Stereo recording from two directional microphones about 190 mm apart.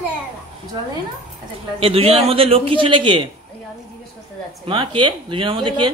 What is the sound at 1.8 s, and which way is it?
A woman's voice, 30° right (ahead or behind).